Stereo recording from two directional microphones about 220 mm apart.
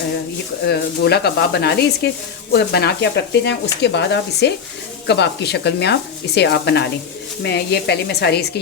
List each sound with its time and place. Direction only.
0.7 s speech: 45° left (ahead or behind)